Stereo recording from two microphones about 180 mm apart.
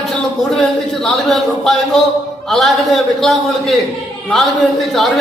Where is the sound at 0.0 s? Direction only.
Centre (ahead or behind).